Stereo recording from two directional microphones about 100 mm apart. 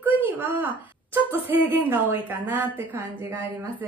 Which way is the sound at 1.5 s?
20° right (ahead or behind).